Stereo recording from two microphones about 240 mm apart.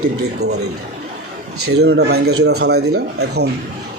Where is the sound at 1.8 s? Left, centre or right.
Right.